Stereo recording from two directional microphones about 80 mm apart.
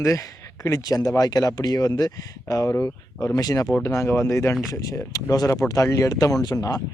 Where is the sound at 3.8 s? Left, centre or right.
Left.